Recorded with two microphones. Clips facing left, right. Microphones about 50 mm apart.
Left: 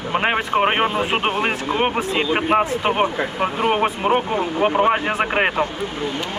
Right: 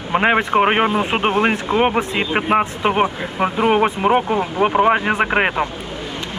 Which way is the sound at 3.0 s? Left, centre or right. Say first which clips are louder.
Right 1 dB; right.